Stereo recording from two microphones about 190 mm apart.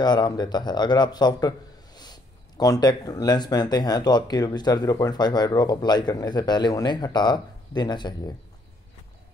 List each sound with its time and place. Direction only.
0.0 s speech: 20° left (ahead or behind)